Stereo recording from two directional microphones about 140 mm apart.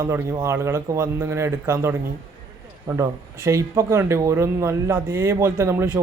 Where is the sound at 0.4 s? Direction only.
20° right (ahead or behind).